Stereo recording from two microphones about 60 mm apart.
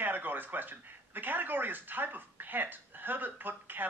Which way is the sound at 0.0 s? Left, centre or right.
Right.